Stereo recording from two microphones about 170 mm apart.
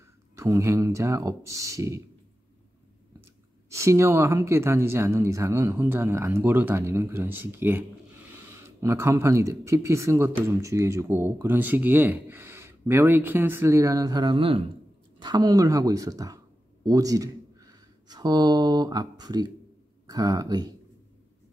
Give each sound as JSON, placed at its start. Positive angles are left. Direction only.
{"t": 0.4, "sound": "speech", "side_deg": -15}
{"t": 3.7, "sound": "a woman's voice", "side_deg": -15}